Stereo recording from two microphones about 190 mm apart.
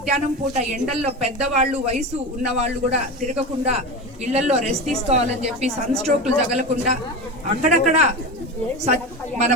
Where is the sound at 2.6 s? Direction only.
35° right (ahead or behind).